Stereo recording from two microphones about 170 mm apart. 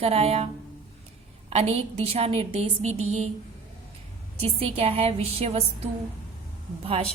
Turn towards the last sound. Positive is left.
turn(degrees=-35)  # may be behind; listen again after turning